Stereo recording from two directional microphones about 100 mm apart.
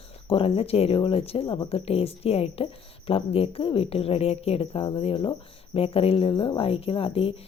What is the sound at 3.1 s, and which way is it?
A woman's voice, 70° left (ahead or behind).